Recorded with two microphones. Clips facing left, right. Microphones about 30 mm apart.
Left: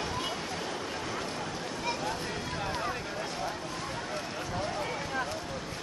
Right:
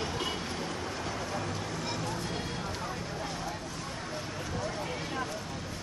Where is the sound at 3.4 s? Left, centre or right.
Left.